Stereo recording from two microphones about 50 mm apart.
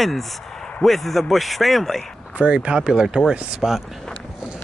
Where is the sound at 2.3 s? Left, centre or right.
Right.